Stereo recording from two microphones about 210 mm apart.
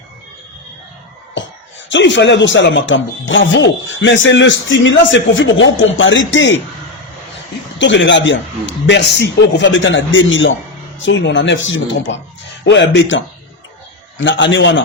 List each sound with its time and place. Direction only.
1.9 s speech: 60° left (ahead or behind)
7.8 s speech: 60° left (ahead or behind)